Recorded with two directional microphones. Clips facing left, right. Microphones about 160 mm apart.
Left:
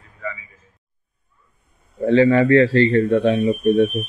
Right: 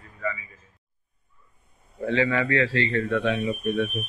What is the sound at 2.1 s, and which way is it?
Speech, 35° left (ahead or behind).